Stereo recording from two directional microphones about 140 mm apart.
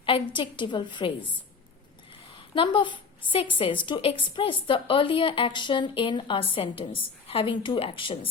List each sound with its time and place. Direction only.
0.0 s a woman's voice: 35° left (ahead or behind)
2.6 s a woman's voice: 35° left (ahead or behind)